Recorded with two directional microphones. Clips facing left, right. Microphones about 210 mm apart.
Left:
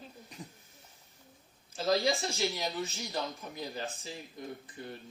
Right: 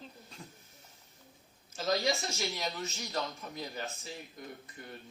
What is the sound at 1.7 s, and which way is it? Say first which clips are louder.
Speech: left 2 dB; 30° left (ahead or behind).